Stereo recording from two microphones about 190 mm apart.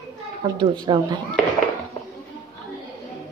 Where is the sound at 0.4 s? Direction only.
25° right (ahead or behind).